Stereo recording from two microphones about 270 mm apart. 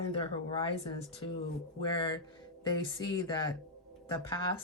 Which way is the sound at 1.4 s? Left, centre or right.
Centre.